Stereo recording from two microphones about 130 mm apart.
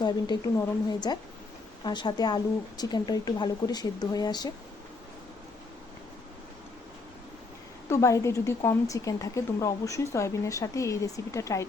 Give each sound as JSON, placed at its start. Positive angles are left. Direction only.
{"t": 0.0, "sound": "speech", "side_deg": 35}
{"t": 7.9, "sound": "speech", "side_deg": 20}